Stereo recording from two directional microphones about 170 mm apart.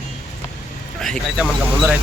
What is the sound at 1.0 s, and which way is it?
Speech, 5° right (ahead or behind).